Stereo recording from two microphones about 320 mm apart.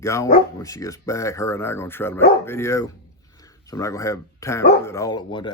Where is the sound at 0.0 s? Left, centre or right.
Centre.